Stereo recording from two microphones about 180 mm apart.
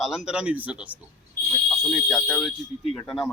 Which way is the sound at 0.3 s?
5° right (ahead or behind).